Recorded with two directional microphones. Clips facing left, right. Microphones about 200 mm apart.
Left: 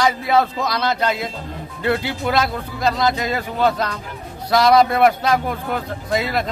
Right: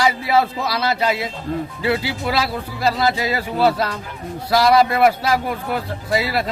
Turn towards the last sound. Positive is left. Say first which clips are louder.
# even
turn(degrees=-5)  # may be behind; listen again after turning